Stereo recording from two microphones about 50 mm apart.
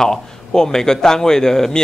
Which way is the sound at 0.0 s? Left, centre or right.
Centre.